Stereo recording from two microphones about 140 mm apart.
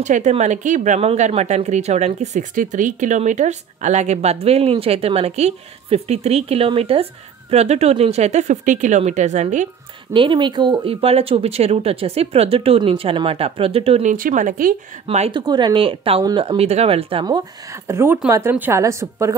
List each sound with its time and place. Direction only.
0.0 s speech: 55° right (ahead or behind)
10.1 s speech: 35° right (ahead or behind)
14.0 s speech: 70° right (ahead or behind)
15.0 s speech: 50° right (ahead or behind)
15.3 s speech: 30° right (ahead or behind)
17.8 s speech: 15° right (ahead or behind)